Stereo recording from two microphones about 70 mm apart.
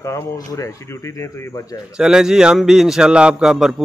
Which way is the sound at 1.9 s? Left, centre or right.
Centre.